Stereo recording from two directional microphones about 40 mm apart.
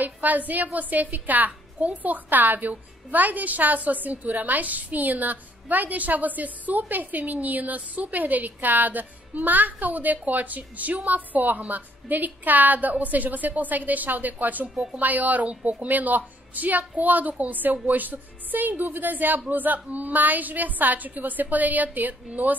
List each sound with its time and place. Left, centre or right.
0.0 s a woman's voice: right